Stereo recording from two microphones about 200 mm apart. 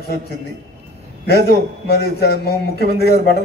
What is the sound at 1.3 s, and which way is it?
A man's voice, 50° left (ahead or behind).